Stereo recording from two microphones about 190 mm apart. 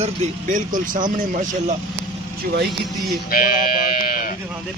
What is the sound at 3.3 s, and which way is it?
Speech, 50° left (ahead or behind).